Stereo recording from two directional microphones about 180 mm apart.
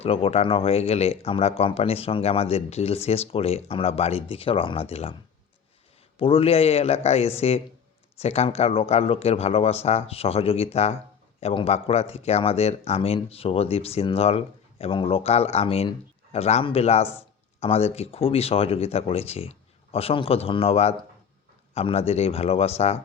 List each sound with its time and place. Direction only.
0.0 s speech: 35° left (ahead or behind)
6.1 s speech: 30° left (ahead or behind)